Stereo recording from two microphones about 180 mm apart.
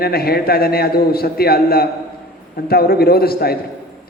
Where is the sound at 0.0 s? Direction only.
60° left (ahead or behind).